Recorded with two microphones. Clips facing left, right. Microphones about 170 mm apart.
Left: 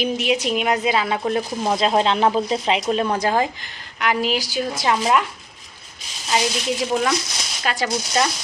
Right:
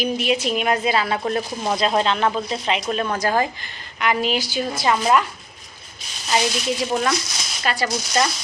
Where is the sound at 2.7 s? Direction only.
25° left (ahead or behind).